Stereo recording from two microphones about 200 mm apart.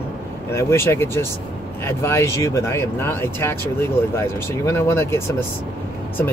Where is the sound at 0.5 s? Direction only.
10° left (ahead or behind).